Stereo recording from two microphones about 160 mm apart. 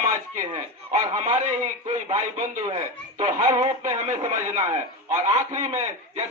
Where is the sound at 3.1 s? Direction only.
40° right (ahead or behind).